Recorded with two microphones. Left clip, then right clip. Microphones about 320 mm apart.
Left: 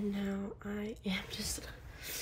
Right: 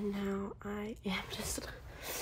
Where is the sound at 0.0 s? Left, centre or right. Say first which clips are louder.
Right 1 dB; centre.